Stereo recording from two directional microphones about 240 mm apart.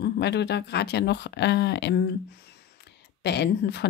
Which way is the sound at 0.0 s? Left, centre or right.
Left.